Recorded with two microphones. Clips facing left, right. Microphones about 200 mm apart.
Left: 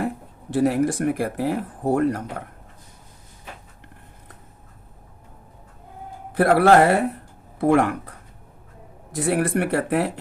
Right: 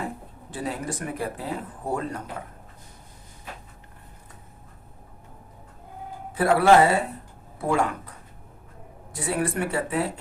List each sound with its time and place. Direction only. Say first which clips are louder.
0.5 s speech: left 11 dB; 70° left (ahead or behind)
6.3 s speech: left 4 dB; 75° left (ahead or behind)
6.7 s speech: even; 55° left (ahead or behind)
9.1 s speech: left 5 dB; 85° left; by 10.1 s 70° left (ahead or behind)